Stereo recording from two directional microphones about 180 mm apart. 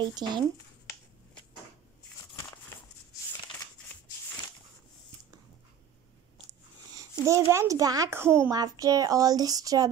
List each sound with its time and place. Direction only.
0.0 s a woman's voice: 25° right (ahead or behind)
7.0 s a woman's voice: 15° right (ahead or behind)